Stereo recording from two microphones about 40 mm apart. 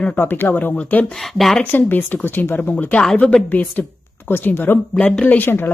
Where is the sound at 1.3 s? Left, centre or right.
Centre.